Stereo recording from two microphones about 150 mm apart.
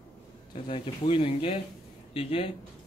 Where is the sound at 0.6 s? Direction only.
35° left (ahead or behind).